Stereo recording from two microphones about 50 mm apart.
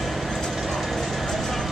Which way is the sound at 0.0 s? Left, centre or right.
Centre.